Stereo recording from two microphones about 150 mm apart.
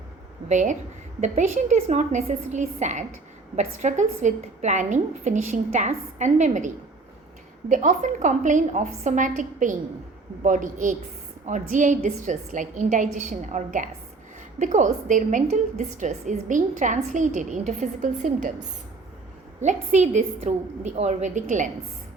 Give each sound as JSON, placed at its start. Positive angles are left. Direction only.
{"t": 0.4, "sound": "a woman's voice", "side_deg": -55}
{"t": 7.7, "sound": "a woman's voice", "side_deg": -55}
{"t": 19.6, "sound": "a woman's voice", "side_deg": -50}